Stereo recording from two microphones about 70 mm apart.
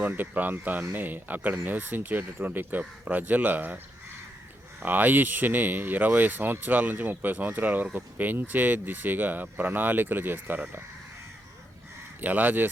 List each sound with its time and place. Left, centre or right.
0.0 s speech: right
4.8 s speech: right
12.2 s speech: right